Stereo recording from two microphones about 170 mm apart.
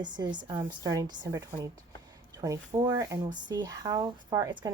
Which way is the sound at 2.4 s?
20° right (ahead or behind).